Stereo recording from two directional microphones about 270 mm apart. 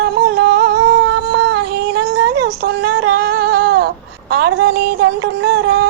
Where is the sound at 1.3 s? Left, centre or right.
Right.